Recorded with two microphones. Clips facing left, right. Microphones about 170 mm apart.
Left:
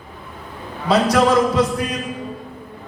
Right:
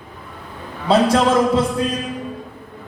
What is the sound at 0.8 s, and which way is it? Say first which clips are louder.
Speech: right 1 dB; 25° right (ahead or behind).